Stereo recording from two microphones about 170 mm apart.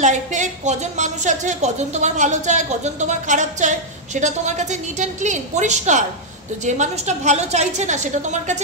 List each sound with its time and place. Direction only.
0.0 s a woman's voice: 45° right (ahead or behind)